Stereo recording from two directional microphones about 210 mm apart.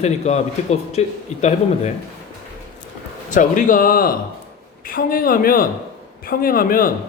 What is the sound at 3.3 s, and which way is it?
A man's voice, 40° left (ahead or behind).